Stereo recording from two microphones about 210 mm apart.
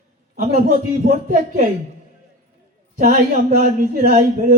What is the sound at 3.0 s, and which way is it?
A man's voice, 35° right (ahead or behind).